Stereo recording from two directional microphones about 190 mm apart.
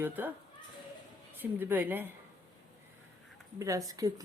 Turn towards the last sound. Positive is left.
turn(degrees=-20)  # may be behind; listen again after turning